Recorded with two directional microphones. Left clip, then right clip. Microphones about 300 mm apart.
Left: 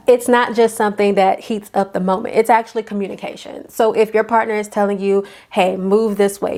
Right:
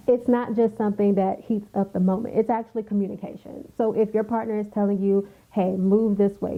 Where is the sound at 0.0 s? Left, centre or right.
Centre.